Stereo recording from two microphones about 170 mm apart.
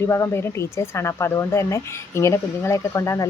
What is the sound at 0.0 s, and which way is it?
Speech, 15° left (ahead or behind).